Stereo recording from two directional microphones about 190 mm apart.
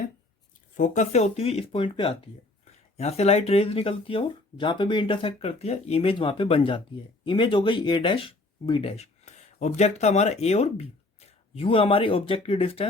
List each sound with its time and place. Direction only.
0.8 s speech: 40° left (ahead or behind)